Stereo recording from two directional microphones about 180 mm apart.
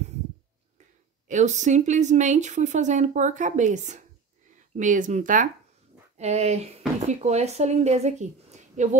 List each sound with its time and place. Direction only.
1.3 s a woman's voice: 40° right (ahead or behind)